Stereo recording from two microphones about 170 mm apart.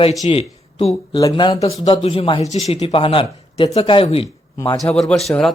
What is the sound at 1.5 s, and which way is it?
A man's voice, 40° left (ahead or behind).